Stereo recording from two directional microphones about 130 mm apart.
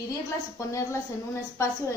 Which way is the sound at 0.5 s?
25° left (ahead or behind).